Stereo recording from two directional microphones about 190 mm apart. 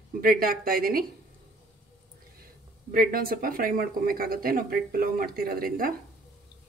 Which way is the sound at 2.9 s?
50° right (ahead or behind).